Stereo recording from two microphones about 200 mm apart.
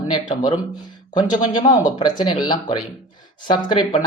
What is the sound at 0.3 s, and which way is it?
Speech, 20° left (ahead or behind).